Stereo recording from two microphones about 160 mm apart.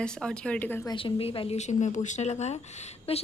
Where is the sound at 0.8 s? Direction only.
30° left (ahead or behind).